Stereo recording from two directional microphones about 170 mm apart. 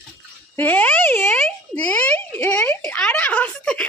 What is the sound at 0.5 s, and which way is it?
Speech, 10° left (ahead or behind).